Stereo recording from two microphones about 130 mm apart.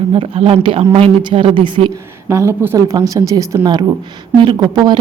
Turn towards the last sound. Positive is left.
turn(degrees=-35)  # may be behind; listen again after turning